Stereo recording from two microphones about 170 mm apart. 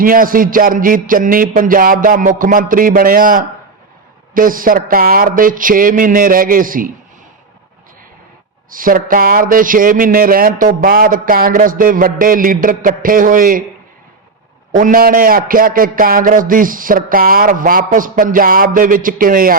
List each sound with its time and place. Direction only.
0.0 s a man's voice: 55° right (ahead or behind)
8.7 s a man's voice: 55° right (ahead or behind)
14.8 s a man's voice: 55° right (ahead or behind)